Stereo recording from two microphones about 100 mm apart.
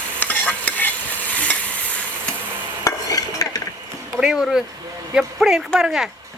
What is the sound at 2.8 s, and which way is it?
Stir, 35° left (ahead or behind).